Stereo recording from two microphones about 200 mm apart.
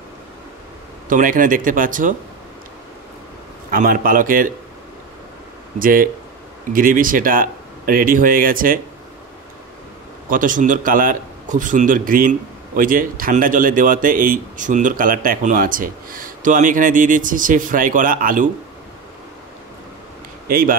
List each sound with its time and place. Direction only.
1.0 s a man's voice: 40° right (ahead or behind)
3.7 s a man's voice: 45° right (ahead or behind)
5.8 s a man's voice: 45° right (ahead or behind)
10.3 s a man's voice: 40° right (ahead or behind)
20.4 s speech: 45° right (ahead or behind)